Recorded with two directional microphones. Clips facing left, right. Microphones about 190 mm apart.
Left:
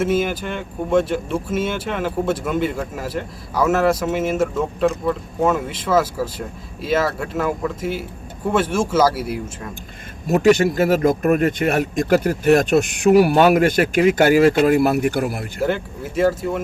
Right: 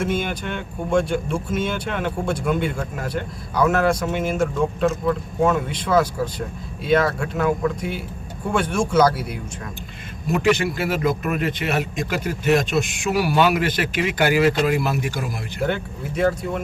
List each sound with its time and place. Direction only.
0.0 s speech: 5° left (ahead or behind)
10.2 s a man's voice: 40° left (ahead or behind)
15.6 s speech: centre (ahead or behind)